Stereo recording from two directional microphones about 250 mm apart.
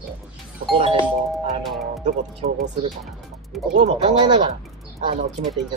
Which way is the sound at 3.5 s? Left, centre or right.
Centre.